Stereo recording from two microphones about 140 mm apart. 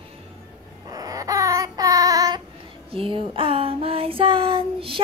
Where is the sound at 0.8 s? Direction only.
25° right (ahead or behind).